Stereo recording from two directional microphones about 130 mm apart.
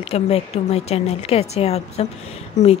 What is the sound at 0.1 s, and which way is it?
A woman's voice, 50° left (ahead or behind).